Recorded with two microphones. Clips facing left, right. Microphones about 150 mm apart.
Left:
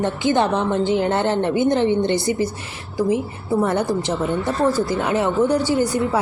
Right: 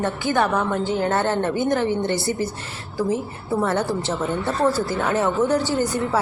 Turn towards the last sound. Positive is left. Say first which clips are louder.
# left 3 dB
turn(degrees=15)  # may be behind; listen again after turning